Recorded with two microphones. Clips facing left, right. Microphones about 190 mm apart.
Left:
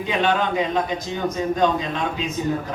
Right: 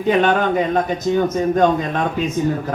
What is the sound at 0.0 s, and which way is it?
A man's voice, 50° right (ahead or behind).